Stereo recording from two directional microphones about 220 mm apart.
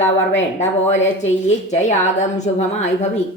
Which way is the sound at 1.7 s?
35° left (ahead or behind).